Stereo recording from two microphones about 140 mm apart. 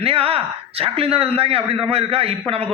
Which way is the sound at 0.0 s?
45° right (ahead or behind).